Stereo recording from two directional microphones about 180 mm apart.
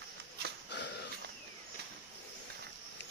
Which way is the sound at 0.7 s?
70° left (ahead or behind).